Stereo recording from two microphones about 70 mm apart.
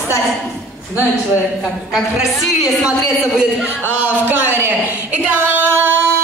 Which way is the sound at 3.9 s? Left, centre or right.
Right.